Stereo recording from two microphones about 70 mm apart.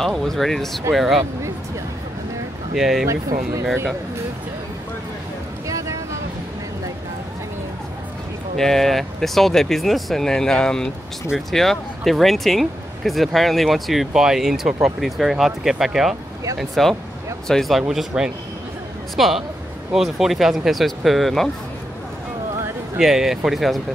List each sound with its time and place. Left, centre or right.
0.0 s speech: centre
2.7 s speech: centre
3.1 s speech: right
5.7 s vehicle: right
8.5 s speech: centre
22.9 s speech: centre